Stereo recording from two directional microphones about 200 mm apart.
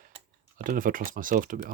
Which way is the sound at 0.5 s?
45° right (ahead or behind).